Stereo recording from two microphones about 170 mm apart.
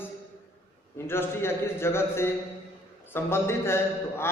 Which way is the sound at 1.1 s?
15° left (ahead or behind).